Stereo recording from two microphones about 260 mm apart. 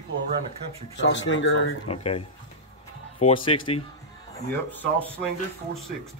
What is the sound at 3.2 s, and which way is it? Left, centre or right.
Speech, left.